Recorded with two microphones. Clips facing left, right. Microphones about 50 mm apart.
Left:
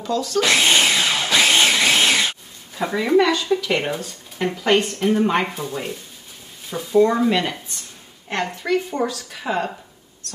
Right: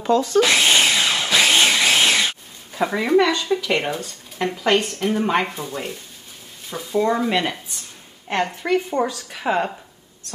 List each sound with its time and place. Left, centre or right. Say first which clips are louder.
0.0 s speech: right 5 dB; right
0.4 s a sound: left 2 dB; centre
6.7 s a woman's voice: left 4 dB; centre